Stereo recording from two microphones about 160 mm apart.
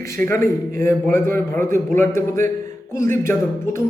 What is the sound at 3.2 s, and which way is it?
Speech, 15° left (ahead or behind).